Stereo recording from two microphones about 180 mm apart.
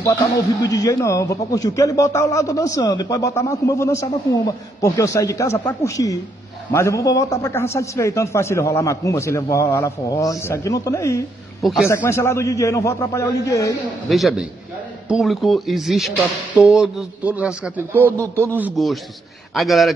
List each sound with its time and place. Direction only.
0.7 s a man's voice: 20° left (ahead or behind)
11.6 s speech: centre (ahead or behind)
11.9 s a man's voice: 15° left (ahead or behind)
14.0 s a man's voice: centre (ahead or behind)
18.6 s speech: centre (ahead or behind)